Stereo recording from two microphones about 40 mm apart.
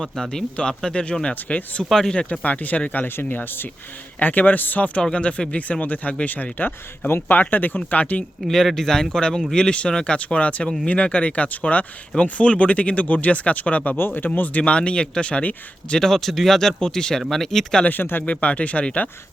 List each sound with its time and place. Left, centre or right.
0.0 s speech: centre
1.2 s speech: left
1.9 s speech: centre
2.4 s speech: left
3.2 s speech: left
4.2 s speech: left
5.1 s speech: left
8.4 s speech: centre
10.2 s speech: left
13.9 s speech: left
14.4 s speech: left
16.0 s speech: centre
18.2 s speech: left